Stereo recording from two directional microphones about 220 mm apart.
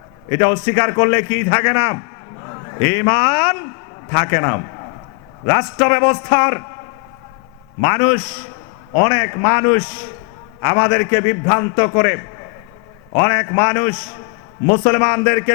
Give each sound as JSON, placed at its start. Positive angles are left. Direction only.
{"t": 0.3, "sound": "a man's voice", "side_deg": 15}
{"t": 7.8, "sound": "a man's voice", "side_deg": 15}